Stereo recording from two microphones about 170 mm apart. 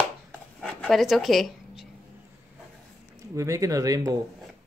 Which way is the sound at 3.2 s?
20° right (ahead or behind).